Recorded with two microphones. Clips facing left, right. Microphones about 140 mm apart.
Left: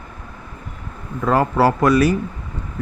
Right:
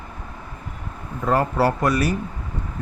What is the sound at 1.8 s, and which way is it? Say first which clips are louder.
Speech: left 6 dB; 90° left.